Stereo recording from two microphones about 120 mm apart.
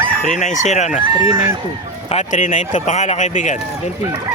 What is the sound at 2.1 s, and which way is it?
Speech, 90° left.